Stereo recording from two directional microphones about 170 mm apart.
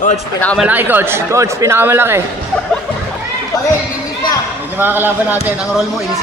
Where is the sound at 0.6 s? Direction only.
10° right (ahead or behind).